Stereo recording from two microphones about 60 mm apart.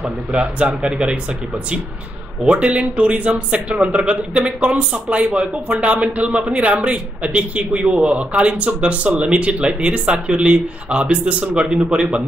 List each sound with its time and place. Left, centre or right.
0.3 s speech: centre
2.4 s speech: centre